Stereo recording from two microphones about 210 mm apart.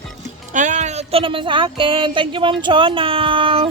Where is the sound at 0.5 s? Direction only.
35° right (ahead or behind).